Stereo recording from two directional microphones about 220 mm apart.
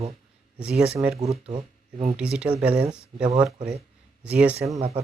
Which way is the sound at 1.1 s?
30° right (ahead or behind).